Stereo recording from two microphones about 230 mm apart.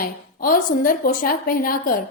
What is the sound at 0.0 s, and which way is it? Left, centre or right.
A woman's voice, left.